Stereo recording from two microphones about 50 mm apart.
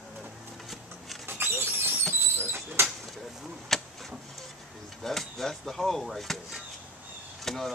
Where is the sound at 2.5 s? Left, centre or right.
Right.